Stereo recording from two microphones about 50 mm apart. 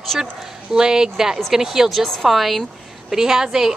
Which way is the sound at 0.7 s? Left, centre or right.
Centre.